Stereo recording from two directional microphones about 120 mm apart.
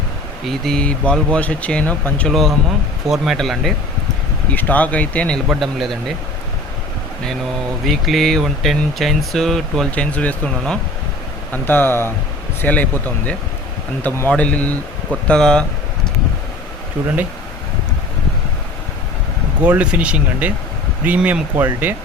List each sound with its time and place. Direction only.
0.4 s speech: 5° left (ahead or behind)
2.3 s speech: centre (ahead or behind)
4.5 s speech: 15° left (ahead or behind)
5.5 s speech: centre (ahead or behind)
7.9 s speech: centre (ahead or behind)
19.6 s speech: 10° right (ahead or behind)